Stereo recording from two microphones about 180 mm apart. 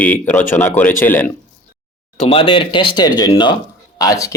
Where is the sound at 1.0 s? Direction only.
10° left (ahead or behind).